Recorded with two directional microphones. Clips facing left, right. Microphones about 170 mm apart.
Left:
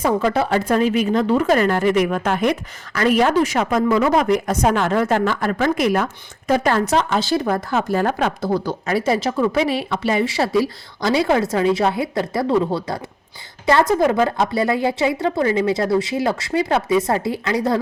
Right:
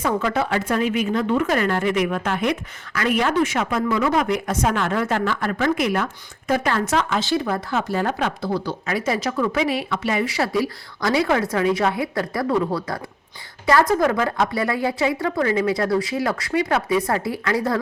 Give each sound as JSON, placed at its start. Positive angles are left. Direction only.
{"t": 0.0, "sound": "speech", "side_deg": 35}
{"t": 9.0, "sound": "speech", "side_deg": 30}